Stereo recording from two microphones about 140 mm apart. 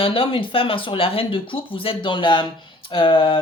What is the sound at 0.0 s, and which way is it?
Speech, 40° left (ahead or behind).